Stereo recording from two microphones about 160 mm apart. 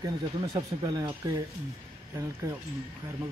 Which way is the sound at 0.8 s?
25° right (ahead or behind).